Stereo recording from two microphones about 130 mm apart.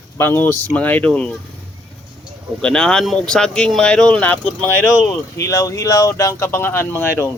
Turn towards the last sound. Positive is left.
turn(degrees=15)  # may be behind; listen again after turning